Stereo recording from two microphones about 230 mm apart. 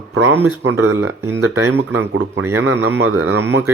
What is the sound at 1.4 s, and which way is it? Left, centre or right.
Speech, right.